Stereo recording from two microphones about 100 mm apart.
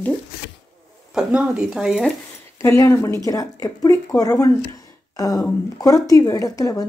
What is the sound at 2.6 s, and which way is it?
Speech, 25° left (ahead or behind).